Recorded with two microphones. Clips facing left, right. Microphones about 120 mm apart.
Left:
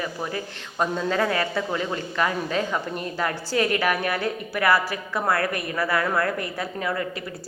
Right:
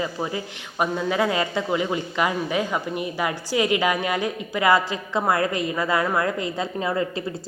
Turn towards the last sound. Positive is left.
turn(degrees=-25)  # may be behind; listen again after turning